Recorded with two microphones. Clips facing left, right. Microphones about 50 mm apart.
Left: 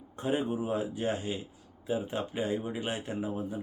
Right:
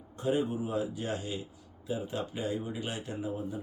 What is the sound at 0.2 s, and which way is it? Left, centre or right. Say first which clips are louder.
Speech: even; left.